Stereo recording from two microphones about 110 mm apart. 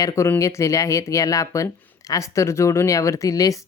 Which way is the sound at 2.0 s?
30° left (ahead or behind).